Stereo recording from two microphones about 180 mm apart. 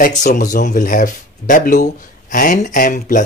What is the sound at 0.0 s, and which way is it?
Speech, 40° left (ahead or behind).